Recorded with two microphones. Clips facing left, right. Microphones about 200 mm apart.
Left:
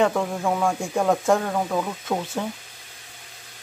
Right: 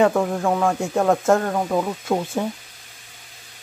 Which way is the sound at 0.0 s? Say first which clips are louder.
Right 3 dB; 5° right (ahead or behind).